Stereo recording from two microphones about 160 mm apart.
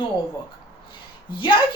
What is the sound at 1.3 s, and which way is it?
Speech, 30° left (ahead or behind).